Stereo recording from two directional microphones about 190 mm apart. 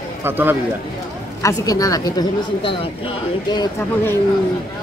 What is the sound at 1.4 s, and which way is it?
A woman's voice, 20° left (ahead or behind).